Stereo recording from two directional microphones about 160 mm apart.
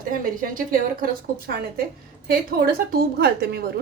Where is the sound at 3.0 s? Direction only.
75° right (ahead or behind).